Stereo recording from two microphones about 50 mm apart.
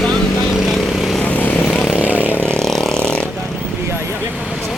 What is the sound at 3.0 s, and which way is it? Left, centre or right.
Vehicle, centre.